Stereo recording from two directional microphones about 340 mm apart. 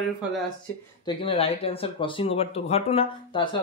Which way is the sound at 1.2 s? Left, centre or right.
Centre.